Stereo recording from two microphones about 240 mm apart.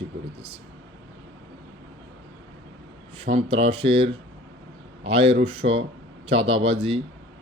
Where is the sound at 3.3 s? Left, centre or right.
Right.